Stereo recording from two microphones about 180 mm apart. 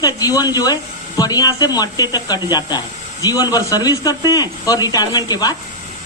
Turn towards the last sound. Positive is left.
turn(degrees=20)  # may be behind; listen again after turning